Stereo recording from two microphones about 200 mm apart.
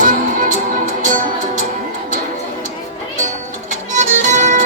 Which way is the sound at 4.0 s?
40° right (ahead or behind).